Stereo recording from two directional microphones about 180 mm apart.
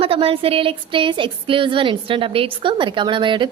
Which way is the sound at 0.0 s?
30° right (ahead or behind).